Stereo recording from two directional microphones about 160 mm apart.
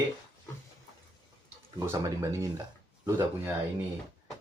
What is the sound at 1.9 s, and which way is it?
Speech, 20° right (ahead or behind).